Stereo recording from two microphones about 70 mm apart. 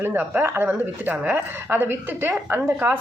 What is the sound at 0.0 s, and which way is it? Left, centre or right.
A woman's voice, right.